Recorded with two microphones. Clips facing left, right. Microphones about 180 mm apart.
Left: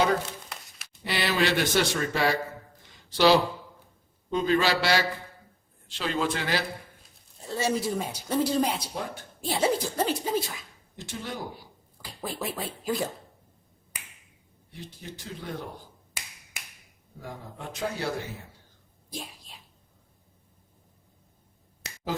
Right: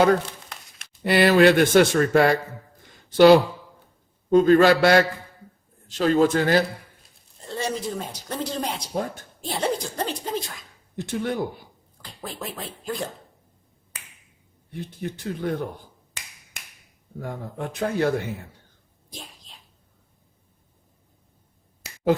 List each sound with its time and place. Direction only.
1.0 s a man's voice: 55° right (ahead or behind)
7.4 s speech: 5° left (ahead or behind)
8.9 s a man's voice: 45° right (ahead or behind)
9.5 s speech: 5° left (ahead or behind)
10.9 s speech: 60° right (ahead or behind)
12.0 s speech: 5° left (ahead or behind)
14.7 s speech: 55° right (ahead or behind)
17.2 s speech: 55° right (ahead or behind)